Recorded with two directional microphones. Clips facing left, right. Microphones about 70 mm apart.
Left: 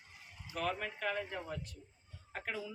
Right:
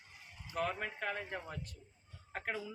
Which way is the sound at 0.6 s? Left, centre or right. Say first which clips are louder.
Even; right.